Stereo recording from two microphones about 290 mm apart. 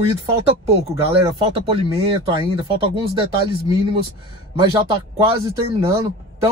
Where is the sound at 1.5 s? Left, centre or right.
Centre.